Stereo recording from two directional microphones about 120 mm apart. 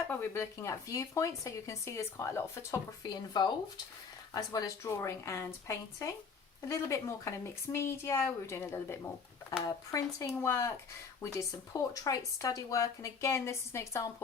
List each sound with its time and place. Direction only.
0.1 s speech: 20° left (ahead or behind)